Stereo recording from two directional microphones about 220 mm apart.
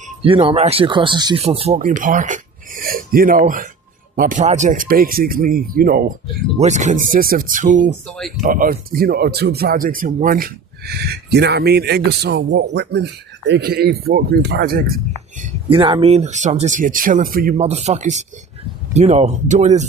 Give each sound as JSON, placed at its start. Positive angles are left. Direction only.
{"t": 0.2, "sound": "speech", "side_deg": -25}
{"t": 8.0, "sound": "speech", "side_deg": 5}
{"t": 8.4, "sound": "speech", "side_deg": -40}
{"t": 15.7, "sound": "speech", "side_deg": -25}